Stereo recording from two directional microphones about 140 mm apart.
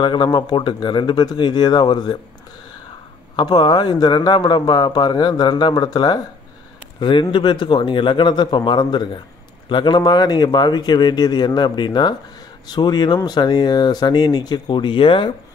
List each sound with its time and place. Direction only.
0.0 s a man's voice: 35° left (ahead or behind)
3.3 s a man's voice: 30° left (ahead or behind)